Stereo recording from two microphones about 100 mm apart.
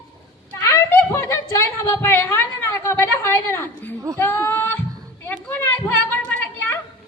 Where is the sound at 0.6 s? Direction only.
25° left (ahead or behind).